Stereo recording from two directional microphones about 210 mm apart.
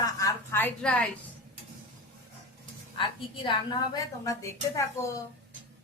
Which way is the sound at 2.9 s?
25° left (ahead or behind).